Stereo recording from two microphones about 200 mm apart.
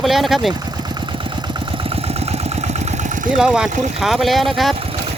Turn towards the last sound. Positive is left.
turn(degrees=0)  # may be behind; listen again after turning